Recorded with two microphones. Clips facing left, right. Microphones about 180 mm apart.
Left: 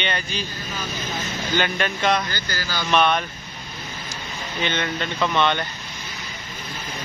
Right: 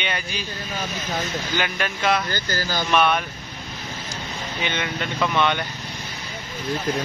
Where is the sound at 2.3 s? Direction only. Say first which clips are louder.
Right 3 dB; 45° right (ahead or behind).